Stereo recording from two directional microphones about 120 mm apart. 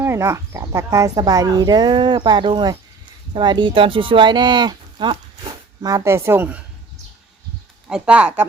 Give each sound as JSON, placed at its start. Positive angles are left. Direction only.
{"t": 0.0, "sound": "speech", "side_deg": -25}
{"t": 5.8, "sound": "a woman's voice", "side_deg": -25}
{"t": 7.9, "sound": "speech", "side_deg": -5}